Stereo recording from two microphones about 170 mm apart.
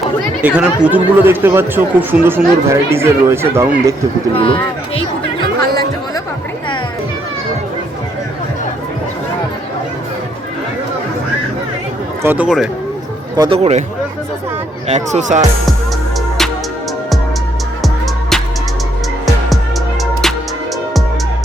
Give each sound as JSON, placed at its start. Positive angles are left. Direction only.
{"t": 0.4, "sound": "speech", "side_deg": -5}
{"t": 4.4, "sound": "a child's voice", "side_deg": 30}
{"t": 12.2, "sound": "speech", "side_deg": -10}
{"t": 13.3, "sound": "speech", "side_deg": -25}
{"t": 13.6, "sound": "speech", "side_deg": -40}
{"t": 14.8, "sound": "speech", "side_deg": -45}
{"t": 17.8, "sound": "music", "side_deg": 0}